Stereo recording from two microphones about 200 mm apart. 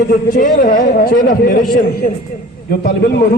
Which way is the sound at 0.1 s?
45° left (ahead or behind).